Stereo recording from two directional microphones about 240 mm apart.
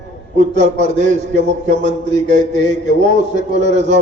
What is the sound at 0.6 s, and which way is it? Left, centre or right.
A man's voice, right.